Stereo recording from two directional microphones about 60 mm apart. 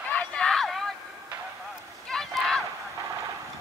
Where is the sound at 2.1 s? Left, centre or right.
Centre.